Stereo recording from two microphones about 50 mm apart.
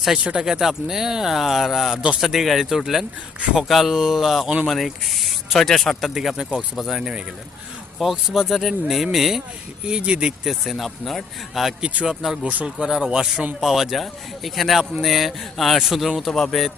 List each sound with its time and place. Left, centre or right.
0.2 s speech: right
0.4 s speech: centre
6.3 s speech: centre
6.7 s speech: centre
9.8 s speech: centre
10.4 s speech: centre
12.0 s speech: centre
12.5 s speech: right
12.8 s speech: centre